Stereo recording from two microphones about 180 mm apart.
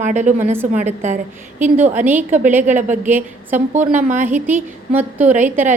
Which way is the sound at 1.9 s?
10° right (ahead or behind).